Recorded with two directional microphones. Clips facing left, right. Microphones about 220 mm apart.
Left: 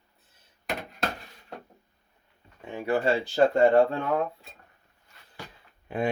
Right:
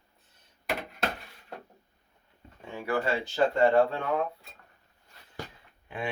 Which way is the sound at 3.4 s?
40° left (ahead or behind).